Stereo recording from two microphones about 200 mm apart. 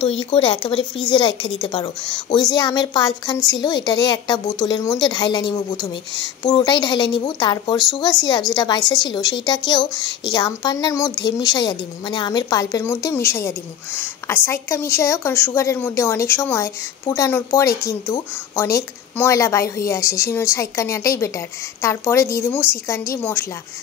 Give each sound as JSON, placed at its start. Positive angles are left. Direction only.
{"t": 0.0, "sound": "a woman's voice", "side_deg": 25}